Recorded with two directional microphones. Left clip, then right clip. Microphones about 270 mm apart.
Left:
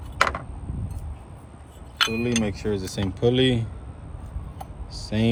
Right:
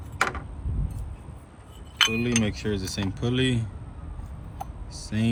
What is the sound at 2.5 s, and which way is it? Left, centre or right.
Cutlery, right.